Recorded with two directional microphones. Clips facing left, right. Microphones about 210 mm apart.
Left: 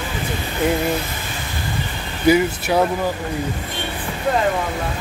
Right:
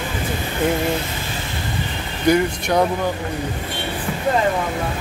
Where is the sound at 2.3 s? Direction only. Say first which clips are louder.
Left 1 dB; 5° left (ahead or behind).